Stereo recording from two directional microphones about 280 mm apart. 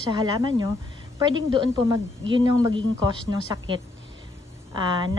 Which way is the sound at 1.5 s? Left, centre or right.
Centre.